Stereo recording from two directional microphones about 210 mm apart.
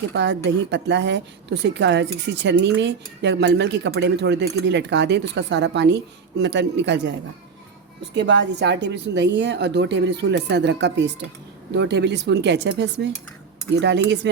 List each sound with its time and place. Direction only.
0.1 s a woman's voice: 55° right (ahead or behind)
8.1 s a woman's voice: 55° right (ahead or behind)